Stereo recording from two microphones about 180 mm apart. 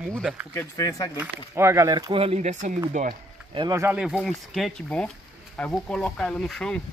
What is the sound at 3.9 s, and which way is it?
Speech, 5° right (ahead or behind).